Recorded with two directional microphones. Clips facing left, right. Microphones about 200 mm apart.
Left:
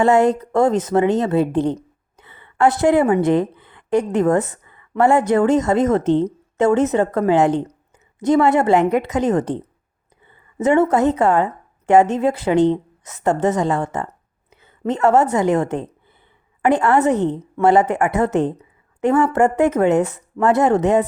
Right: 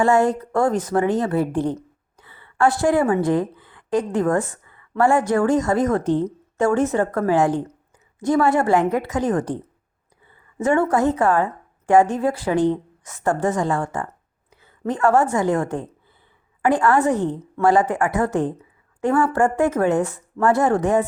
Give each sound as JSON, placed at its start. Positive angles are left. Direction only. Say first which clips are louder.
{"t": 0.0, "sound": "a woman's voice", "louder": "left 3 dB", "side_deg": 20}